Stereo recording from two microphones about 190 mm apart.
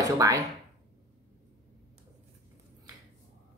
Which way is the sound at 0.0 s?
15° right (ahead or behind).